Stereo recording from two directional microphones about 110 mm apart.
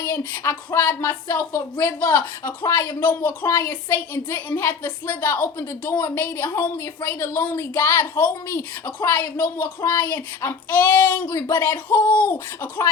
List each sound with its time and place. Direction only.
0.0 s a woman's voice: 25° left (ahead or behind)